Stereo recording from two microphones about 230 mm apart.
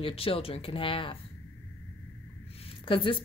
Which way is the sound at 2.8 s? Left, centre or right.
Left.